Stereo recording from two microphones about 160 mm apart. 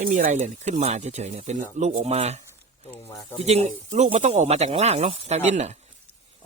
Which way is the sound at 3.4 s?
40° right (ahead or behind).